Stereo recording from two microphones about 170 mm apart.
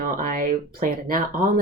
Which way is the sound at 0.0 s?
55° right (ahead or behind).